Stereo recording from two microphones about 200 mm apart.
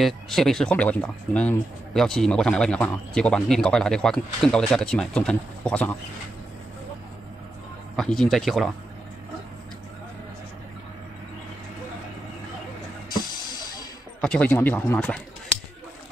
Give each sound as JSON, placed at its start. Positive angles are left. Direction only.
{"t": 0.0, "sound": "speech", "side_deg": 0}
{"t": 7.9, "sound": "speech", "side_deg": 5}
{"t": 13.1, "sound": "music", "side_deg": 20}
{"t": 14.2, "sound": "speech", "side_deg": 5}